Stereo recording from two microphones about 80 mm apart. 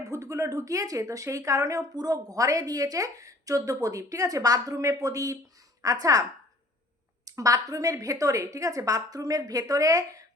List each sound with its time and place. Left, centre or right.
0.0 s speech: right
2.0 s speech: right
7.3 s speech: right